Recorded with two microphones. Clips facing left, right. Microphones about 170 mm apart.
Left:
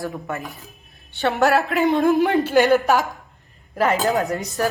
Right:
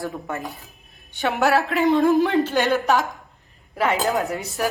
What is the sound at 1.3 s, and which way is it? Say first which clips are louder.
A woman's voice: left 2 dB; 5° right (ahead or behind).